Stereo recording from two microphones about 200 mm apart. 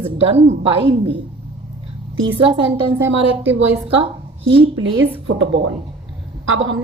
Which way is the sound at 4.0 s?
25° right (ahead or behind).